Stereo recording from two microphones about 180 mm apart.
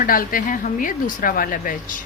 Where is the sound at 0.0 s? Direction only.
50° left (ahead or behind).